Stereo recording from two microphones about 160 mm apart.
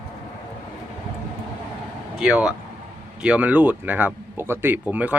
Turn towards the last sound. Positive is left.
turn(degrees=-10)  # may be behind; listen again after turning